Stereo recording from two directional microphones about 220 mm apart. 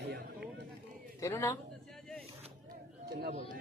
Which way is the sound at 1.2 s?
15° left (ahead or behind).